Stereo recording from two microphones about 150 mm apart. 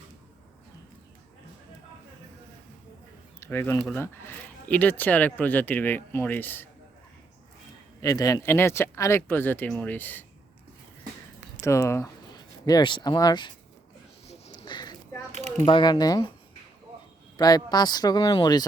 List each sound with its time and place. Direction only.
3.4 s speech: 15° left (ahead or behind)
8.0 s speech: 20° left (ahead or behind)
11.6 s speech: 20° left (ahead or behind)
14.3 s a sound: 45° left (ahead or behind)
14.6 s a sound: 30° left (ahead or behind)
15.3 s mechanisms: 50° right (ahead or behind)
15.6 s speech: 30° left (ahead or behind)
17.3 s speech: 25° left (ahead or behind)